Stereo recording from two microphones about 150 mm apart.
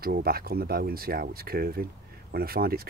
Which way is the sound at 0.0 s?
85° right.